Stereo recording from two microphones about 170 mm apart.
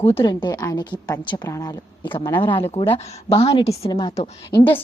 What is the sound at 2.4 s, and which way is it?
A woman's voice, 30° left (ahead or behind).